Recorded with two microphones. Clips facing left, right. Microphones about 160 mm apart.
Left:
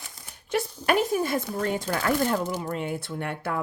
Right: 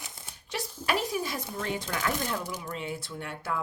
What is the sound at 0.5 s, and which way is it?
Speech, 55° left (ahead or behind).